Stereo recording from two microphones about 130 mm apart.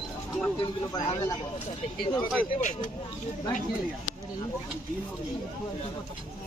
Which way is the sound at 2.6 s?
75° left (ahead or behind).